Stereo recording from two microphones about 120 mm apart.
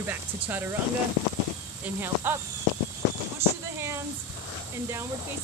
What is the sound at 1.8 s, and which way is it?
Speech, 20° right (ahead or behind).